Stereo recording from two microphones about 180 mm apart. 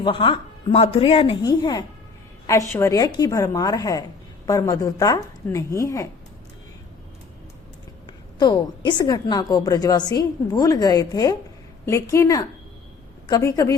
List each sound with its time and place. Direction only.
0.0 s a woman's voice: 30° left (ahead or behind)
8.4 s a woman's voice: 25° left (ahead or behind)